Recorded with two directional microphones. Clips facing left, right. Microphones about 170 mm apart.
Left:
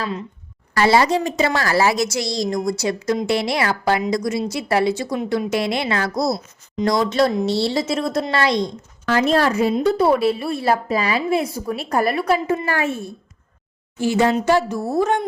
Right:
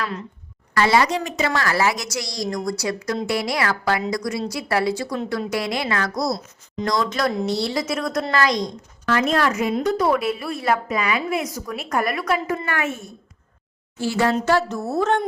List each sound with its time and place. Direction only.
0.0 s a woman's voice: 20° left (ahead or behind)
0.8 s a woman's voice: 30° left (ahead or behind)
14.0 s a woman's voice: 20° left (ahead or behind)